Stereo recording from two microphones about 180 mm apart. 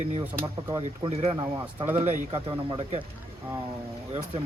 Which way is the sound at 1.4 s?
15° right (ahead or behind).